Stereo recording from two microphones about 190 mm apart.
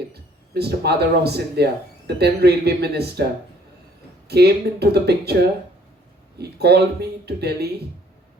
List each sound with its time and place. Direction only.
0.1 s speech: 60° right (ahead or behind)
4.3 s speech: 60° right (ahead or behind)
6.4 s speech: 60° right (ahead or behind)